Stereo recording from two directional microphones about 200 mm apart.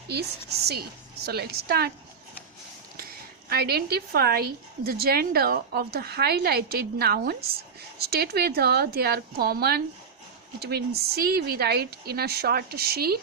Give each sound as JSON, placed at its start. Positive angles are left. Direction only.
{"t": 0.1, "sound": "a woman's voice", "side_deg": -55}
{"t": 3.5, "sound": "a woman's voice", "side_deg": -50}